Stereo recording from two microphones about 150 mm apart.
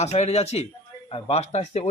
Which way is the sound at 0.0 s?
45° left (ahead or behind).